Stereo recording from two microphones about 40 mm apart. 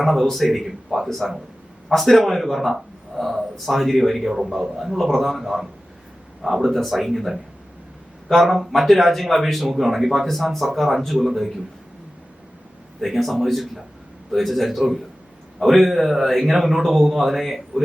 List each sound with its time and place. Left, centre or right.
0.0 s a man's voice: centre
13.0 s a man's voice: centre